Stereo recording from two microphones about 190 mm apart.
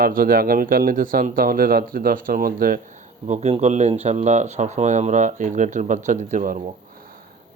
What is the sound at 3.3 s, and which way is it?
Speech, 35° right (ahead or behind).